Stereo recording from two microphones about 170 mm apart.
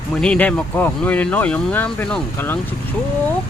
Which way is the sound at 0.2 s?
5° left (ahead or behind).